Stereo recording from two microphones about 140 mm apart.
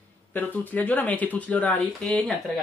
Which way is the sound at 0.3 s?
10° left (ahead or behind).